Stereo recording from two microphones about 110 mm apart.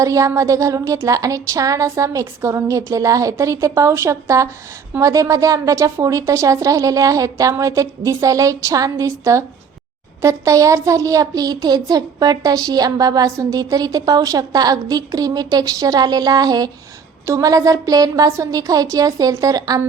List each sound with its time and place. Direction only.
0.0 s speech: 30° right (ahead or behind)